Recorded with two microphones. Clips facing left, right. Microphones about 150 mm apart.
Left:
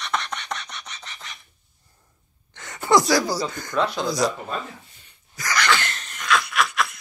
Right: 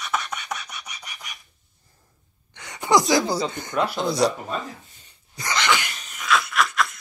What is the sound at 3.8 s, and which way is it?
Speech, 5° right (ahead or behind).